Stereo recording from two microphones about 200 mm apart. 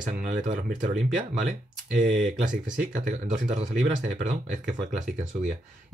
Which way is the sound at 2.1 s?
40° right (ahead or behind).